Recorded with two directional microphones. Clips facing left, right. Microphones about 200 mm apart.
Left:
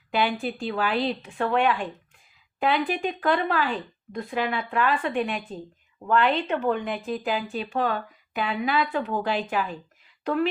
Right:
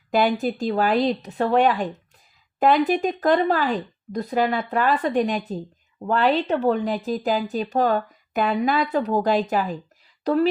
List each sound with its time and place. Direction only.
0.1 s speech: 45° right (ahead or behind)